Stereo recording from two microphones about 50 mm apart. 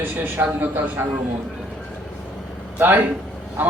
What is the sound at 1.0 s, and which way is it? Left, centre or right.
Speech, right.